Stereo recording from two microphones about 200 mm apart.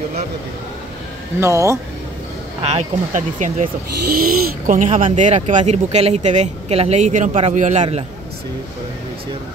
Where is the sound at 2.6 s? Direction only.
35° right (ahead or behind).